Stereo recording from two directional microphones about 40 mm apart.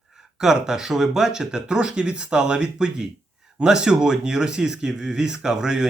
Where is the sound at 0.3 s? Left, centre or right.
Centre.